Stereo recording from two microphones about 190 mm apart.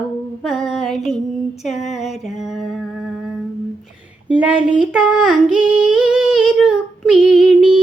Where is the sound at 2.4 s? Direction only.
Centre (ahead or behind).